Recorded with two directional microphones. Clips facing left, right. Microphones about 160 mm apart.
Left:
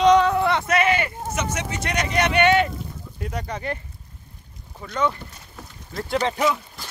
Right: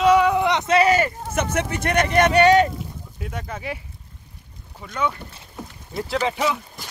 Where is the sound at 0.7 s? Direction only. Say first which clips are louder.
Right 4 dB; 40° right (ahead or behind).